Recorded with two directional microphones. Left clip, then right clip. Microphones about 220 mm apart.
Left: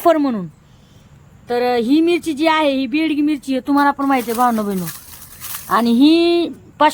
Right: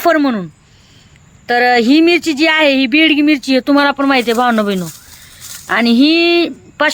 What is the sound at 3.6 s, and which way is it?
Speech, 25° right (ahead or behind).